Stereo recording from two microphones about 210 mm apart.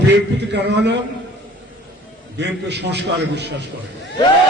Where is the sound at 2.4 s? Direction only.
55° right (ahead or behind).